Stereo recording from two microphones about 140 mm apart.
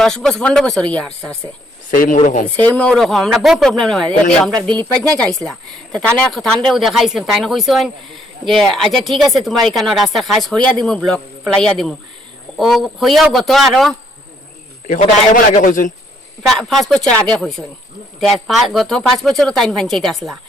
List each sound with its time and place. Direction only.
0.0 s speech: 5° left (ahead or behind)
1.9 s speech: 70° left (ahead or behind)
2.6 s speech: 10° left (ahead or behind)
15.5 s a man's voice: 70° left (ahead or behind)
16.6 s speech: centre (ahead or behind)